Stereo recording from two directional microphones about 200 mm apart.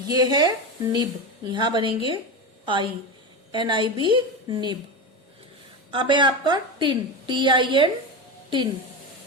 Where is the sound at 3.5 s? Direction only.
25° right (ahead or behind).